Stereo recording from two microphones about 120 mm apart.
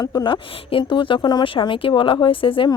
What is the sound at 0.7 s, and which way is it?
Speech, 45° left (ahead or behind).